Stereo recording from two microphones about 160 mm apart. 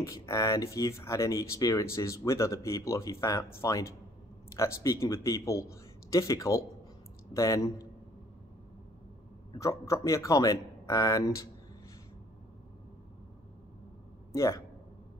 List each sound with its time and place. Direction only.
0.0 s a man's voice: 20° left (ahead or behind)
9.5 s a man's voice: 20° left (ahead or behind)
14.3 s a man's voice: 20° left (ahead or behind)